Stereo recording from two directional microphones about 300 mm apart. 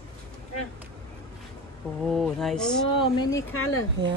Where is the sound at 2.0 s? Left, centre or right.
Centre.